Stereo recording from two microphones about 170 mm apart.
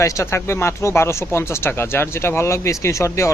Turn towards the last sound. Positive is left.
turn(degrees=15)  # may be behind; listen again after turning